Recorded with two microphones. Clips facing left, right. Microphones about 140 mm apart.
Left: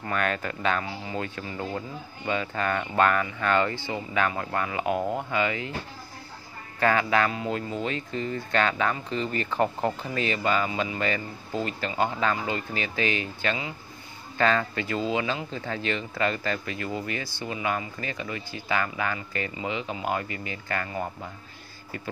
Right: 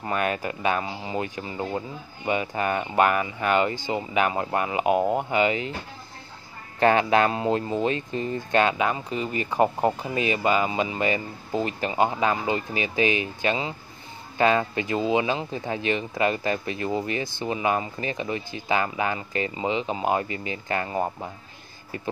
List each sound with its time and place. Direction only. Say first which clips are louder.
0.0 s speech: right 2 dB; 15° right (ahead or behind)
6.8 s speech: right 4 dB; 25° right (ahead or behind)